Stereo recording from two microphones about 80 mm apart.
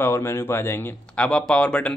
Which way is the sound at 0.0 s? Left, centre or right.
Left.